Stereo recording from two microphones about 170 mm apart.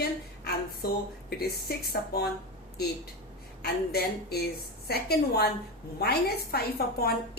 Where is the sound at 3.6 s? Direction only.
65° left (ahead or behind).